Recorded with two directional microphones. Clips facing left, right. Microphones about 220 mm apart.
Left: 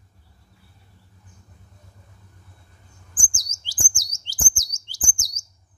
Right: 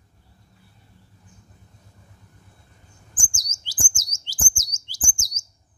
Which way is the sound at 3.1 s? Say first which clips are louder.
Even; 20° right (ahead or behind).